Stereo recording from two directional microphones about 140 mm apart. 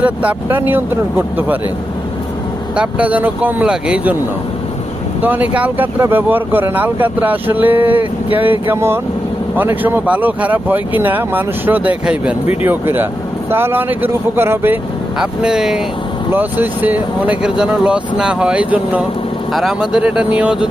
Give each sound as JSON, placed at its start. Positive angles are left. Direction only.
{"t": 0.0, "sound": "speech", "side_deg": -10}
{"t": 2.7, "sound": "speech", "side_deg": -10}
{"t": 5.2, "sound": "speech", "side_deg": -10}
{"t": 15.2, "sound": "speech", "side_deg": -5}